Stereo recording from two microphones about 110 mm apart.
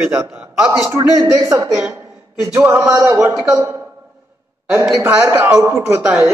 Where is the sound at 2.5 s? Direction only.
25° right (ahead or behind).